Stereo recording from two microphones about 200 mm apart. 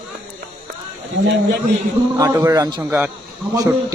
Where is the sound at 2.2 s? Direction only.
15° right (ahead or behind).